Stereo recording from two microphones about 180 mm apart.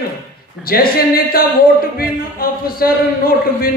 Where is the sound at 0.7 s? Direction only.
55° left (ahead or behind).